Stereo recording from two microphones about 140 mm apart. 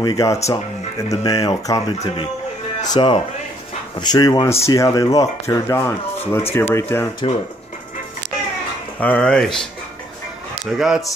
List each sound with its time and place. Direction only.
0.0 s speech: 25° left (ahead or behind)
9.0 s speech: 10° left (ahead or behind)
10.8 s speech: centre (ahead or behind)